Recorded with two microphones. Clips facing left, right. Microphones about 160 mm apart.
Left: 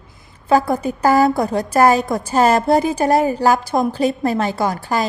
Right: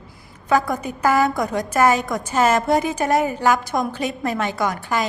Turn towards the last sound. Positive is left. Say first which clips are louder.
# left 3 dB
turn(degrees=35)  # may be behind; listen again after turning